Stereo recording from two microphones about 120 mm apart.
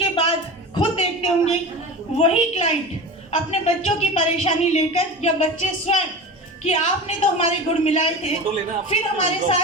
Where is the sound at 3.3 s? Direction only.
60° left (ahead or behind).